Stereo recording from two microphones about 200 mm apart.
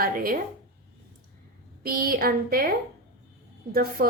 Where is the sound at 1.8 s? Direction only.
45° right (ahead or behind).